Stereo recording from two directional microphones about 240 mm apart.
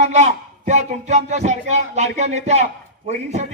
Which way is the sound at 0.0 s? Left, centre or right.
Right.